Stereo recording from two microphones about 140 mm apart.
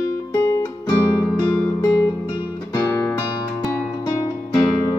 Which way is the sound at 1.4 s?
5° left (ahead or behind).